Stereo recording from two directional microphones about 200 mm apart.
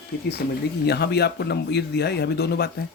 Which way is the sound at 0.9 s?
55° left (ahead or behind).